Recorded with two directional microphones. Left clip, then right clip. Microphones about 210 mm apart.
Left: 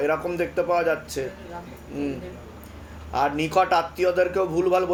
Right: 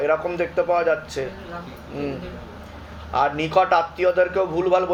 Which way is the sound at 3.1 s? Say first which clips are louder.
Right 3 dB; 35° left (ahead or behind).